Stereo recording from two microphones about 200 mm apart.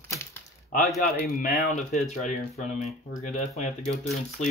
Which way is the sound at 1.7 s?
35° left (ahead or behind).